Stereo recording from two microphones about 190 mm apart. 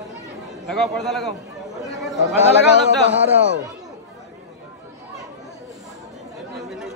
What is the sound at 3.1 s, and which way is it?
Speech, 65° right (ahead or behind).